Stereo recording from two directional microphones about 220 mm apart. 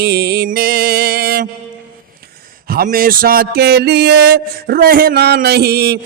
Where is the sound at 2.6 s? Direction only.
40° right (ahead or behind).